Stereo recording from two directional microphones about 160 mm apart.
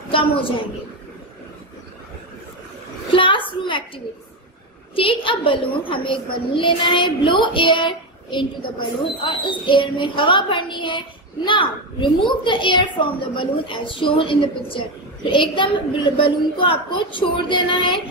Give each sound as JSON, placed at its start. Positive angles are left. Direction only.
{"t": 0.1, "sound": "a woman's voice", "side_deg": 35}
{"t": 3.1, "sound": "a sound", "side_deg": 35}
{"t": 4.9, "sound": "a woman's voice", "side_deg": 35}